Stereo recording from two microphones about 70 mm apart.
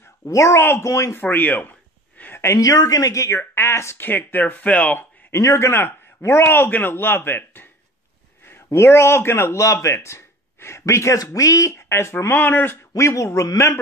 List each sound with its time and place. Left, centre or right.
0.2 s speech: left
1.2 s a sound: left
2.4 s speech: left
4.1 s speech: left
5.3 s a man's voice: left
11.9 s a man's voice: left
12.9 s speech: left